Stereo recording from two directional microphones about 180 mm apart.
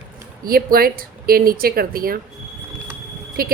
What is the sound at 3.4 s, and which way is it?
Speech, 55° right (ahead or behind).